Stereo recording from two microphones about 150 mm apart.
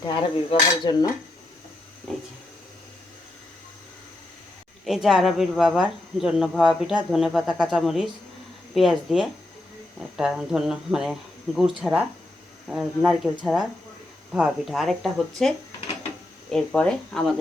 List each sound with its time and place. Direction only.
0.0 s cutlery: 30° left (ahead or behind)
0.9 s dishes: 30° left (ahead or behind)
2.1 s a sound: centre (ahead or behind)
4.9 s speech: centre (ahead or behind)